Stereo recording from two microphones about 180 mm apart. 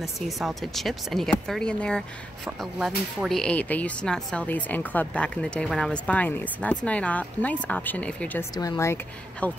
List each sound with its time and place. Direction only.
0.0 s a woman's voice: centre (ahead or behind)
8.5 s a woman's voice: 20° left (ahead or behind)